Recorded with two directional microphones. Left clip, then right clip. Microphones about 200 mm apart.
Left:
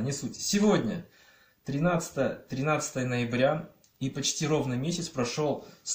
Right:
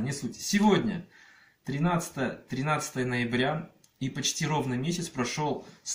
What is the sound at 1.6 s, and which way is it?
Speech, 20° left (ahead or behind).